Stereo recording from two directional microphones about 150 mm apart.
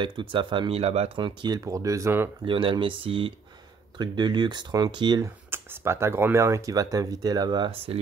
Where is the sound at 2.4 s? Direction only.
35° right (ahead or behind).